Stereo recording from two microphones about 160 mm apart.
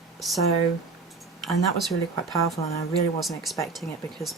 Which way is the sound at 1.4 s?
Centre (ahead or behind).